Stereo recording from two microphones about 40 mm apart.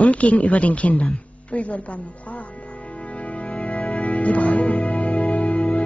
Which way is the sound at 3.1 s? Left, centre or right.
Left.